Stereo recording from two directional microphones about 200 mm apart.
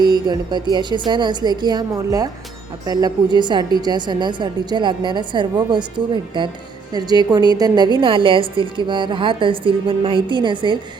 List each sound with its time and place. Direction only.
0.0 s a woman's voice: 20° right (ahead or behind)
6.9 s a woman's voice: 20° right (ahead or behind)